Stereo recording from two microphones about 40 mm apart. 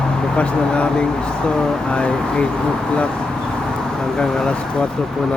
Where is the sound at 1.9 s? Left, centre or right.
Left.